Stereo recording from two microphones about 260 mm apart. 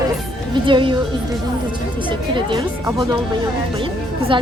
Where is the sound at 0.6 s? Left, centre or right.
Centre.